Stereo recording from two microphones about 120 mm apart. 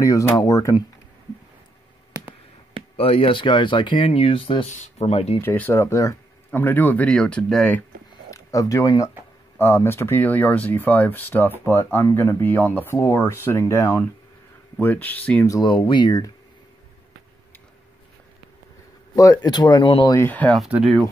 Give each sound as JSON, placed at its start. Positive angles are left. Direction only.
{"t": 0.0, "sound": "speech", "side_deg": 25}
{"t": 3.0, "sound": "speech", "side_deg": 50}
{"t": 4.6, "sound": "speech", "side_deg": 85}
{"t": 5.4, "sound": "speech", "side_deg": 20}
{"t": 8.3, "sound": "speech", "side_deg": 30}
{"t": 15.9, "sound": "speech", "side_deg": 35}
{"t": 19.1, "sound": "speech", "side_deg": 30}
{"t": 20.1, "sound": "speech", "side_deg": 20}
{"t": 20.5, "sound": "speech", "side_deg": -5}